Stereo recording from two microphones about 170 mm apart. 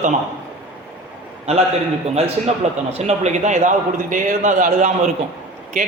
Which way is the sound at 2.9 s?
40° right (ahead or behind).